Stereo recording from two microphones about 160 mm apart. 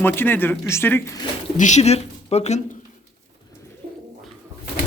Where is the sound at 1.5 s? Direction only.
50° left (ahead or behind).